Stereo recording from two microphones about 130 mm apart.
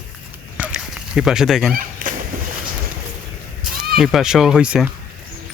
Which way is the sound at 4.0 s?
5° right (ahead or behind).